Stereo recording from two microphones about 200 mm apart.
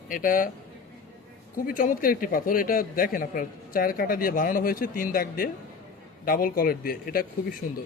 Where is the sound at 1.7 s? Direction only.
45° left (ahead or behind).